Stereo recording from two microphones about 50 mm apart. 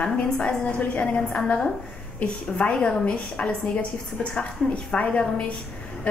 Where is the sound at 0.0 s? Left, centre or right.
Centre.